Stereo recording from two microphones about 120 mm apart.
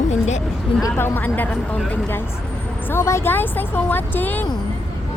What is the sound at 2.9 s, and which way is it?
A woman's voice, 20° left (ahead or behind).